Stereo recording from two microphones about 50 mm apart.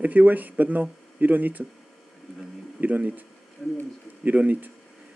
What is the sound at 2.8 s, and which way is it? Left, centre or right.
Speech, right.